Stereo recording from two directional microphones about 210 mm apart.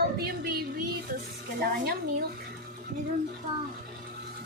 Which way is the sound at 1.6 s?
50° right (ahead or behind).